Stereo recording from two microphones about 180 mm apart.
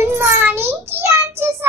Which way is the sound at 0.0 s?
15° right (ahead or behind).